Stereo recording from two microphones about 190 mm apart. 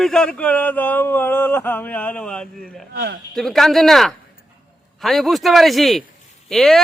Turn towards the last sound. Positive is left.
turn(degrees=0)  # may be behind; listen again after turning